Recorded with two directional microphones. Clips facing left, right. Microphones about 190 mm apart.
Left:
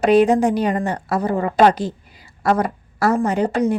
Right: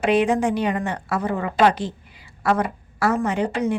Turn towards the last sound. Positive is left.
turn(degrees=40)  # may be behind; listen again after turning